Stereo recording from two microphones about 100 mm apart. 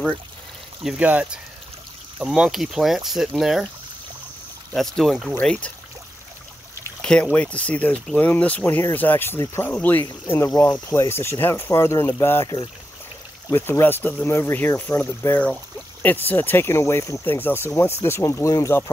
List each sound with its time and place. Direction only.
0.8 s speech: 15° right (ahead or behind)
4.7 s speech: centre (ahead or behind)
5.4 s speech: 10° left (ahead or behind)
7.0 s speech: 10° left (ahead or behind); by 9.7 s 30° left (ahead or behind)
9.7 s speech: 20° left (ahead or behind)
13.5 s speech: 25° left (ahead or behind)
17.6 s speech: 30° left (ahead or behind)